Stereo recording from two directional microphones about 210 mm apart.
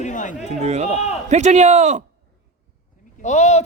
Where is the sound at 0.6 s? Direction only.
30° right (ahead or behind).